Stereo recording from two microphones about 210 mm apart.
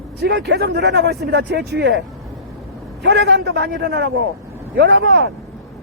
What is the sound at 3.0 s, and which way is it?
A woman's voice, 55° right (ahead or behind).